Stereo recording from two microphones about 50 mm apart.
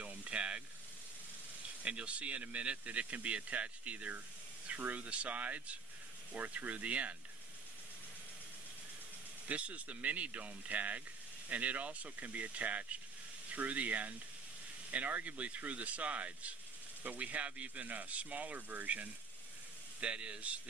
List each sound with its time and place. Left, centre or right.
0.0 s spray: right
1.8 s speech: right
9.5 s speech: right